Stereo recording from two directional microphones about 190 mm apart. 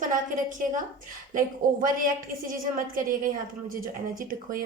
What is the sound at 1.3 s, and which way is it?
Speech, 45° right (ahead or behind).